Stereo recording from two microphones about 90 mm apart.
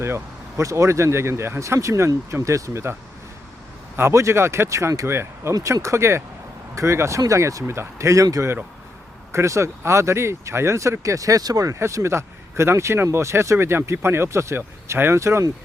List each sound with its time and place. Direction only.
0.0 s speech: 30° right (ahead or behind)
3.9 s speech: 30° right (ahead or behind)